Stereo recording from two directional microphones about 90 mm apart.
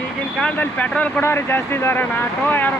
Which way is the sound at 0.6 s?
15° left (ahead or behind).